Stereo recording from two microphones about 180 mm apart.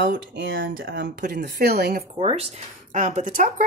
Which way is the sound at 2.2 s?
35° right (ahead or behind).